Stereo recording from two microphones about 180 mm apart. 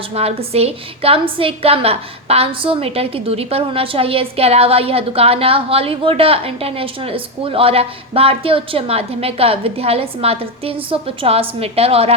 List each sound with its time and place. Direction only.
0.1 s a woman's voice: 35° right (ahead or behind)